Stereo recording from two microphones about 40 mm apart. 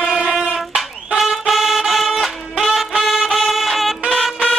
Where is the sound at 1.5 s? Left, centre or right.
Centre.